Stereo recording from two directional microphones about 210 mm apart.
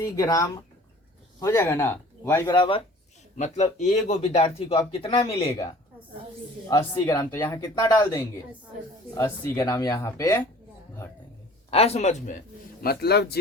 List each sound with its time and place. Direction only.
0.0 s speech: 15° left (ahead or behind)
6.7 s speech: 15° left (ahead or behind)
11.7 s a man's voice: 30° left (ahead or behind)
12.8 s a man's voice: 50° left (ahead or behind)